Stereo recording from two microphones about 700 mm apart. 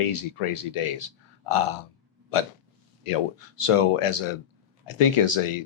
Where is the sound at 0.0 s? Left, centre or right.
Left.